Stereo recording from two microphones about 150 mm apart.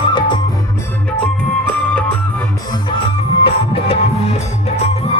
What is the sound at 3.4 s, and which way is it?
Music, 40° left (ahead or behind).